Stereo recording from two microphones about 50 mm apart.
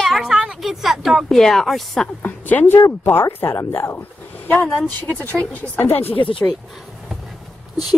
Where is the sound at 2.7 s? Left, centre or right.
Left.